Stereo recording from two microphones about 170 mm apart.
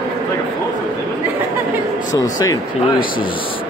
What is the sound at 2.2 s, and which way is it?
Speech, 20° left (ahead or behind).